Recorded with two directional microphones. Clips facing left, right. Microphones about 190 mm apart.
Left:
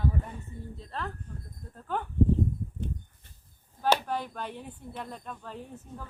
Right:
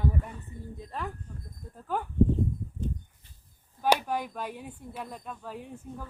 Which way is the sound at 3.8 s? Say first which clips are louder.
Right 1 dB; 10° right (ahead or behind).